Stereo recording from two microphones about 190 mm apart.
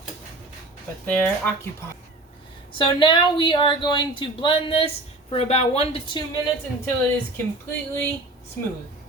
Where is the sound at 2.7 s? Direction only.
25° left (ahead or behind).